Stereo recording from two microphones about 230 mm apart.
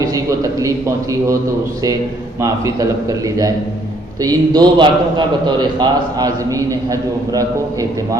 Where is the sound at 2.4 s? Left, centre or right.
Centre.